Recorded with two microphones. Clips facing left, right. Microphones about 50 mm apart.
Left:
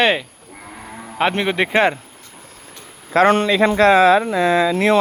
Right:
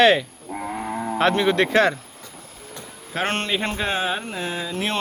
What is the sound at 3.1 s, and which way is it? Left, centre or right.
Speech, left.